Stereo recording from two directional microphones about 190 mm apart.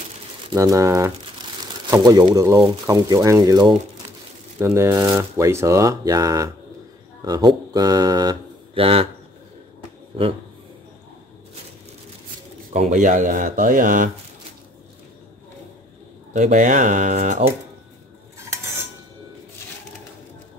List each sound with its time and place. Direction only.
0.6 s speech: 15° right (ahead or behind)
12.7 s speech: 40° right (ahead or behind)
16.3 s speech: 40° right (ahead or behind)